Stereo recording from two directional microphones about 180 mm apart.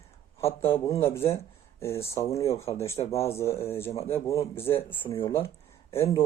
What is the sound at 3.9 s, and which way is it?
Speech, 30° left (ahead or behind).